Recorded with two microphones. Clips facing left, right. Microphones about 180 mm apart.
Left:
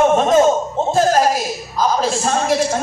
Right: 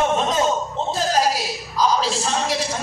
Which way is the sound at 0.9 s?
50° left (ahead or behind).